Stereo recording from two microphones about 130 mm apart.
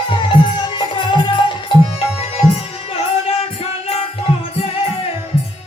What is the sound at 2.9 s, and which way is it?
Music, 50° left (ahead or behind).